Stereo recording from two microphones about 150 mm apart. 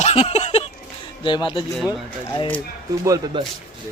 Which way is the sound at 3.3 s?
30° right (ahead or behind).